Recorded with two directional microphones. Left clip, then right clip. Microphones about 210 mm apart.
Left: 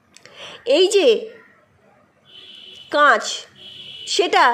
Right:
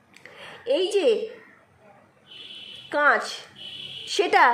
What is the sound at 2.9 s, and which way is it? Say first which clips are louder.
A woman's voice: left 6 dB; 10° left (ahead or behind).